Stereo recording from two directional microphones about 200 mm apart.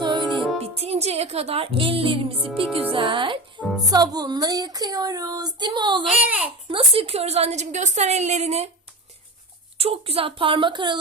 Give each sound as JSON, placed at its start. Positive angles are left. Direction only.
{"t": 0.0, "sound": "music", "side_deg": -20}
{"t": 0.6, "sound": "speech", "side_deg": -30}
{"t": 3.6, "sound": "music", "side_deg": 0}
{"t": 3.9, "sound": "speech", "side_deg": -20}
{"t": 6.2, "sound": "a child's voice", "side_deg": -5}
{"t": 6.7, "sound": "a woman's voice", "side_deg": -30}
{"t": 9.7, "sound": "speech", "side_deg": -30}